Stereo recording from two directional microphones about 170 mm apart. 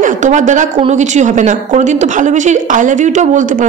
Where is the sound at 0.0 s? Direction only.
45° right (ahead or behind).